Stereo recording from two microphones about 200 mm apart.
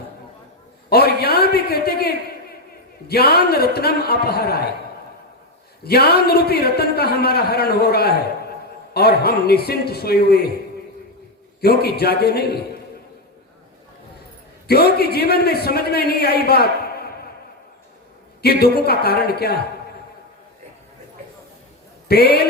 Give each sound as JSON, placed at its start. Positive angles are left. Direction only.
{"t": 0.9, "sound": "a man's voice", "side_deg": 50}
{"t": 5.8, "sound": "a man's voice", "side_deg": 50}
{"t": 11.6, "sound": "a man's voice", "side_deg": 50}
{"t": 14.7, "sound": "a man's voice", "side_deg": 50}
{"t": 18.4, "sound": "a man's voice", "side_deg": 50}
{"t": 22.1, "sound": "a man's voice", "side_deg": 50}